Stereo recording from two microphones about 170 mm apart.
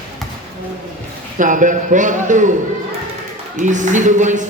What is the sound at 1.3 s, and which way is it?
Speech, 50° right (ahead or behind).